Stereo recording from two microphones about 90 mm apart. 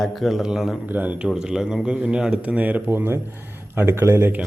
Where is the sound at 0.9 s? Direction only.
20° right (ahead or behind).